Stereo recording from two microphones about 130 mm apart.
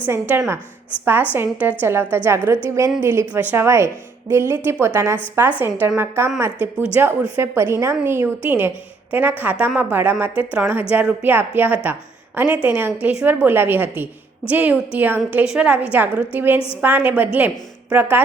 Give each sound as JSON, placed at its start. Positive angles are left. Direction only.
{"t": 0.0, "sound": "a woman's voice", "side_deg": -15}